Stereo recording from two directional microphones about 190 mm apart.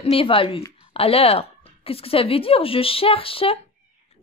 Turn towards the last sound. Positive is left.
turn(degrees=30)  # may be behind; listen again after turning